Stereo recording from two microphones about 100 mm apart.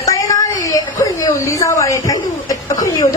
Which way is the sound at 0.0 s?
35° left (ahead or behind).